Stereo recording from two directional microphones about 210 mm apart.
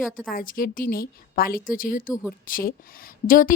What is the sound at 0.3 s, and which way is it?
A woman's voice, 45° left (ahead or behind).